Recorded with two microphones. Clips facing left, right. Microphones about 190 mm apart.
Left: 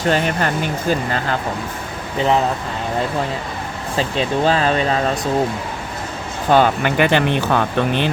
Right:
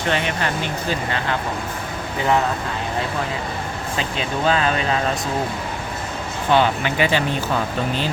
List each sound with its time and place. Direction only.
0.1 s speech: 45° left (ahead or behind)
3.9 s speech: 35° left (ahead or behind)
6.5 s speech: 50° left (ahead or behind); by 8.1 s 65° left (ahead or behind)